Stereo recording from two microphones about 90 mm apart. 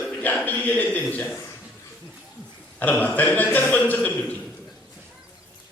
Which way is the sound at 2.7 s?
20° left (ahead or behind).